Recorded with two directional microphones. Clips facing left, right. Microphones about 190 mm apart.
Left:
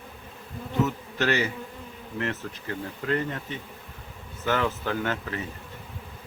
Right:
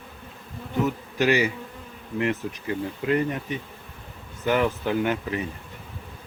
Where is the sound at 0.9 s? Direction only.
10° right (ahead or behind).